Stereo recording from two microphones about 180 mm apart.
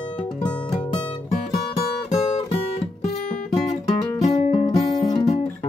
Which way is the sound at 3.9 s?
35° left (ahead or behind).